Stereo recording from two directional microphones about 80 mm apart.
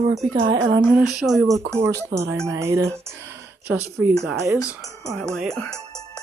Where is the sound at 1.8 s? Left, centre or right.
Right.